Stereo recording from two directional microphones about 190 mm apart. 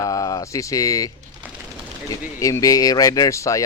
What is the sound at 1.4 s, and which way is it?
Typewriter, 10° right (ahead or behind).